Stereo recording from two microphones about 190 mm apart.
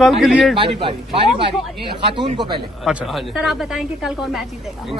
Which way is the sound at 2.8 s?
5° right (ahead or behind).